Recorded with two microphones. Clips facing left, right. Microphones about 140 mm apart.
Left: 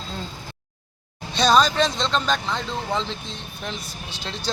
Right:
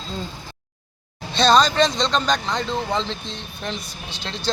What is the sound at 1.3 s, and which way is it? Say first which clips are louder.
Speech: right 2 dB; 10° left (ahead or behind).